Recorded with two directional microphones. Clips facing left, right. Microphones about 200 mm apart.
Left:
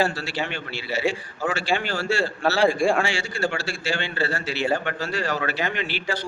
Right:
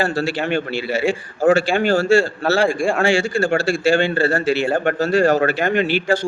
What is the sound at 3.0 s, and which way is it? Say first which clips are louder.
Speech: right 8 dB; 50° right (ahead or behind).